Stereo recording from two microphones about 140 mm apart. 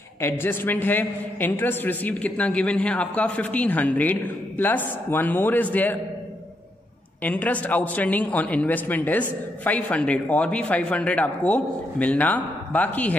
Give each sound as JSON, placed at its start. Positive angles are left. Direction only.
{"t": 0.2, "sound": "a man's voice", "side_deg": 15}
{"t": 7.2, "sound": "a man's voice", "side_deg": 10}